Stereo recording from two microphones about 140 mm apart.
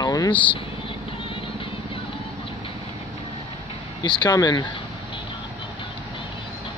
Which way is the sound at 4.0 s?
30° left (ahead or behind).